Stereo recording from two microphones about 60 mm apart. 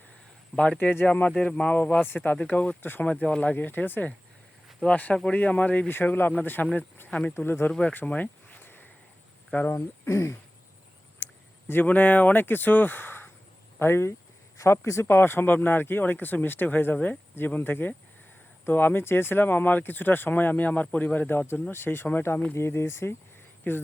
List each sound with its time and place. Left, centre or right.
0.5 s speech: centre
0.8 s speech: left
1.3 s speech: centre
2.4 s speech: centre
2.8 s speech: left
5.9 s speech: left
7.1 s speech: centre
7.3 s speech: left
7.7 s speech: centre
8.0 s a sound: left
9.6 s speech: left
11.7 s speech: left